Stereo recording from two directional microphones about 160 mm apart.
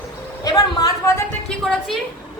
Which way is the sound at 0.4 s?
25° left (ahead or behind).